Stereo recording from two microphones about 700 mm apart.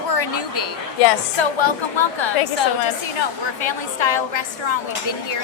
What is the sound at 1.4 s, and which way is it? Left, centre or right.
A woman's voice, left.